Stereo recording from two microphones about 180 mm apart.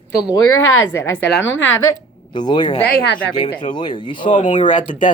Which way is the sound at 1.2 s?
85° left.